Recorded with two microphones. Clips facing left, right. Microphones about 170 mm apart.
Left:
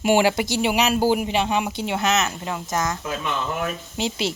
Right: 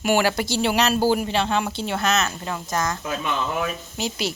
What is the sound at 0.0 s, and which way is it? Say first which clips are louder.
Speech: left 2 dB; 25° left (ahead or behind).